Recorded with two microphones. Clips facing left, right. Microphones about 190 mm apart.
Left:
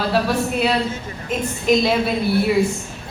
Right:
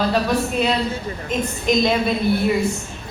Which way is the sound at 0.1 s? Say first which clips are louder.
Even; 5° left (ahead or behind).